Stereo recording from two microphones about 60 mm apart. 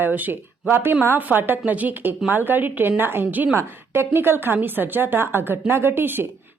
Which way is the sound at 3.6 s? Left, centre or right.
Right.